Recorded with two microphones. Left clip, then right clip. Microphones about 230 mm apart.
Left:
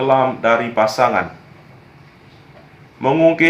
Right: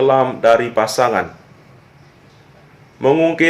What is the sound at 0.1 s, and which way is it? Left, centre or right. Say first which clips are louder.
A man's voice: right 2 dB; right.